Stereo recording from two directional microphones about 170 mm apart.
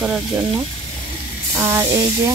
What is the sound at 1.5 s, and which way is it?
Speech, 20° right (ahead or behind).